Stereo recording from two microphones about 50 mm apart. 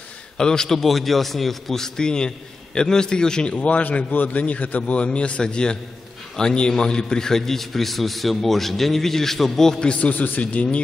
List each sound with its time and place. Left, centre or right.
0.4 s a man's voice: centre
9.8 s speech: left